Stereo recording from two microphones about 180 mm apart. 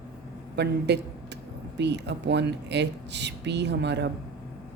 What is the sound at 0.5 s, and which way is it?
A man's voice, 70° right (ahead or behind).